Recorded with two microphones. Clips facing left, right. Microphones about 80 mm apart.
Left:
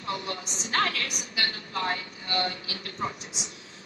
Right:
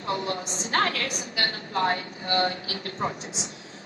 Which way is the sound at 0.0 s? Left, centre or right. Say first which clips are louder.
Right 4 dB; right.